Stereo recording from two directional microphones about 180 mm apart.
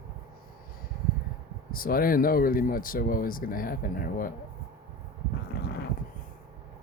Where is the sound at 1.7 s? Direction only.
55° left (ahead or behind).